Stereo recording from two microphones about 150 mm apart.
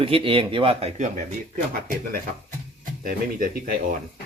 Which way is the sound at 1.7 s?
75° right (ahead or behind).